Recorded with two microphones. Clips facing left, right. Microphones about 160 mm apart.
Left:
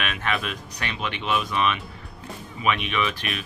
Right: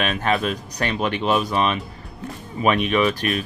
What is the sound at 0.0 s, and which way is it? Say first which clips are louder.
Speech: right 6 dB; 35° right (ahead or behind).